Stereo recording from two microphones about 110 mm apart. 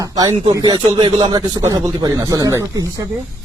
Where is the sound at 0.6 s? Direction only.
45° right (ahead or behind).